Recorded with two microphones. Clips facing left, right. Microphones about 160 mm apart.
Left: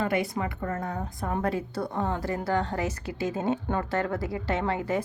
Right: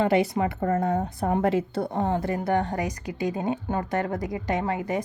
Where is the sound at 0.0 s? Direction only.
25° right (ahead or behind).